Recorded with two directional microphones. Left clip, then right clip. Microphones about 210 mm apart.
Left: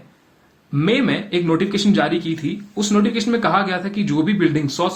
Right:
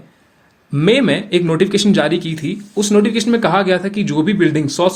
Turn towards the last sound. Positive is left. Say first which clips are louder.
# right 4 dB
turn(degrees=-45)  # may be behind; listen again after turning